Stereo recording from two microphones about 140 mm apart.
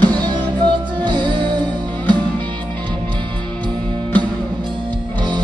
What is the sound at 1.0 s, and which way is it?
Music, 35° right (ahead or behind).